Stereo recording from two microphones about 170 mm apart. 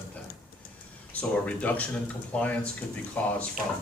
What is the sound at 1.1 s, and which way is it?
Speech, 10° left (ahead or behind).